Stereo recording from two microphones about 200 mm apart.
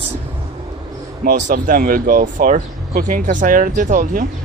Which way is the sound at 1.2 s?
45° right (ahead or behind).